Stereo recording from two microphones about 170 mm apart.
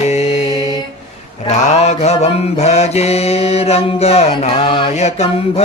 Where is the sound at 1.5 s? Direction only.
40° left (ahead or behind).